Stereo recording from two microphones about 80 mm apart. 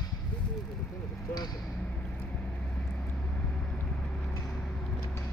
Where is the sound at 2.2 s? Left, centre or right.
Centre.